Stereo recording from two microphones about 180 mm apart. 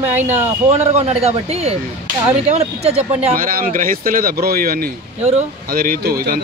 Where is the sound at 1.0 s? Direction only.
35° right (ahead or behind).